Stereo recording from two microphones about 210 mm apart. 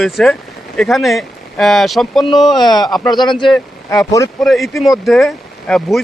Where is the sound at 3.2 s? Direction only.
20° left (ahead or behind).